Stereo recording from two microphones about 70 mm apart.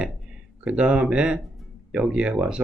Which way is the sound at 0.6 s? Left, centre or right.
Centre.